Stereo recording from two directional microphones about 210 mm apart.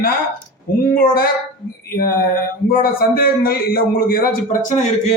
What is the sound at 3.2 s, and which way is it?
Speech, 45° left (ahead or behind).